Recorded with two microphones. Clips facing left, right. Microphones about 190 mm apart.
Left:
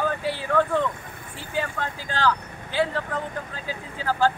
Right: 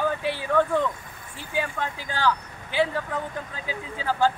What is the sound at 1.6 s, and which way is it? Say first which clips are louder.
Speech: even; 15° right (ahead or behind).